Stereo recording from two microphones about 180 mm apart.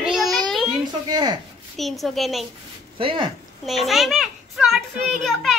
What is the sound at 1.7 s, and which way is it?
Speech, centre (ahead or behind).